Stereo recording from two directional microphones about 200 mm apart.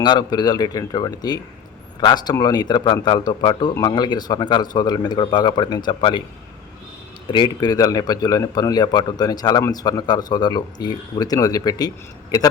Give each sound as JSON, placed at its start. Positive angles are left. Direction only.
{"t": 0.0, "sound": "a man's voice", "side_deg": 20}
{"t": 7.3, "sound": "a man's voice", "side_deg": 20}